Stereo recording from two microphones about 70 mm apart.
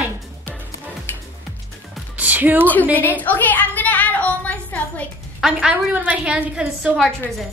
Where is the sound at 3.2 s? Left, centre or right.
Left.